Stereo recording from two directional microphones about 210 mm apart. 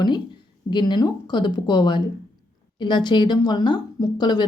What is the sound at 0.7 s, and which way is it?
A woman's voice, 20° left (ahead or behind).